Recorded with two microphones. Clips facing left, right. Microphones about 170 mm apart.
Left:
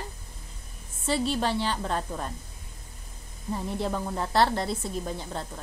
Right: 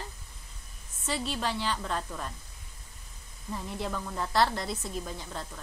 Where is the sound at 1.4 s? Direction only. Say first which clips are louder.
Left 4 dB; 30° left (ahead or behind).